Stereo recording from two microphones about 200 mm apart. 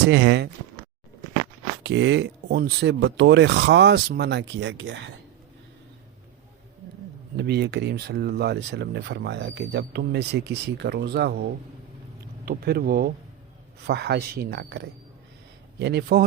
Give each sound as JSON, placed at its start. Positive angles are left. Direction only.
{"t": 0.1, "sound": "speech", "side_deg": -60}
{"t": 1.8, "sound": "speech", "side_deg": -60}
{"t": 7.3, "sound": "speech", "side_deg": -55}